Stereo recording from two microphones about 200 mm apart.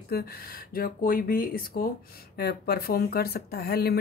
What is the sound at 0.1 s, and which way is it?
Speech, 50° left (ahead or behind).